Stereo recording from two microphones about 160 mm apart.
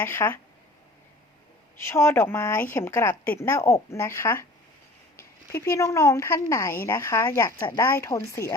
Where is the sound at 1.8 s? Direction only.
15° left (ahead or behind).